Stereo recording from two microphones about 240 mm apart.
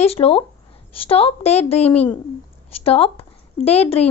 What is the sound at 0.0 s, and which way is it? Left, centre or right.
A woman's voice, left.